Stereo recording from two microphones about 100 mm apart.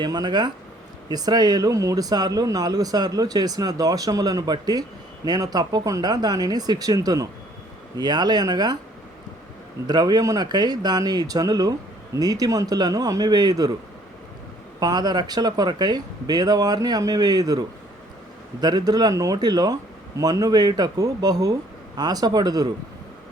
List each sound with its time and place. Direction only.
0.0 s speech: 45° right (ahead or behind)
9.8 s speech: 45° right (ahead or behind)
14.8 s speech: 40° right (ahead or behind)